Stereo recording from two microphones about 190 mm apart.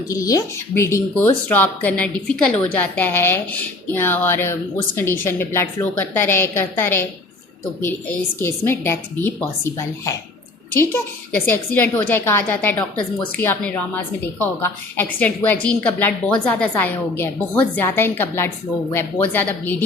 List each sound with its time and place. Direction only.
0.1 s speech: 20° left (ahead or behind)